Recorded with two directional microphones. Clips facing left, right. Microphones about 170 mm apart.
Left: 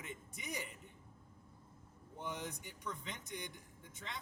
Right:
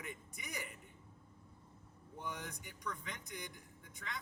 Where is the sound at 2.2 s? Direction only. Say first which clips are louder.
Left 2 dB; 20° left (ahead or behind).